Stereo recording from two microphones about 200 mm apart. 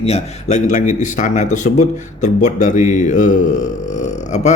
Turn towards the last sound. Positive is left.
turn(degrees=35)  # may be behind; listen again after turning